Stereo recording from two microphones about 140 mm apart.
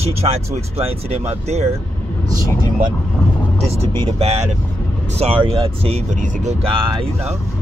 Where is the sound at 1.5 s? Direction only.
50° right (ahead or behind).